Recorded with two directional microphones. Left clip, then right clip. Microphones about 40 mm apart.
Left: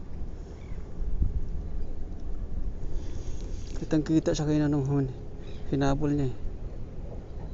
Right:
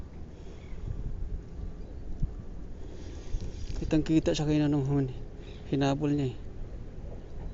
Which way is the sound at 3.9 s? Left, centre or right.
Right.